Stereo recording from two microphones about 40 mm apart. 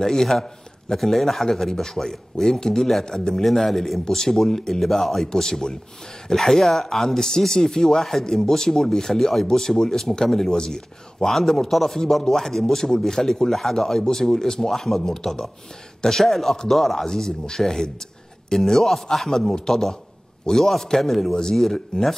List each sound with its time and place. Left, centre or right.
0.0 s a man's voice: centre